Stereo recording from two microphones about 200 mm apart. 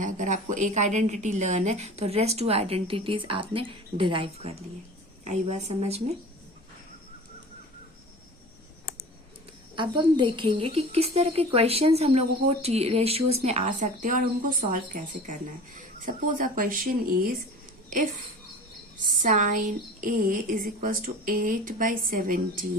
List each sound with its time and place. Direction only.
0.0 s speech: 40° right (ahead or behind)
9.7 s speech: 25° right (ahead or behind); by 16.9 s 45° right (ahead or behind)
19.2 s a woman's voice: 40° right (ahead or behind)